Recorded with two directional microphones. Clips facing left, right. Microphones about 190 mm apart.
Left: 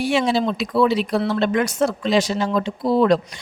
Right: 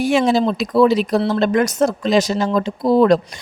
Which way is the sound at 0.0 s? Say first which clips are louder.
Right 4 dB; 45° right (ahead or behind).